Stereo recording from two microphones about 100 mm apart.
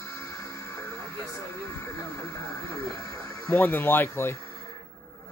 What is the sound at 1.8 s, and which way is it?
Speech, 25° left (ahead or behind).